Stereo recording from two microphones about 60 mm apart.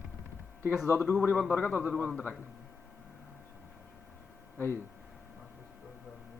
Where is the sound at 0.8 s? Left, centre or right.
Left.